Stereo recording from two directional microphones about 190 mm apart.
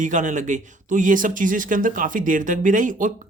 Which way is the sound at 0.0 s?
40° right (ahead or behind).